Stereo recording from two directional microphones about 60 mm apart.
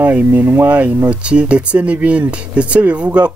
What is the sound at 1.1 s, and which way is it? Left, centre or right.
Speech, centre.